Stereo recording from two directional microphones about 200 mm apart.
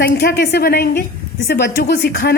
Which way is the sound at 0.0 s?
50° left (ahead or behind).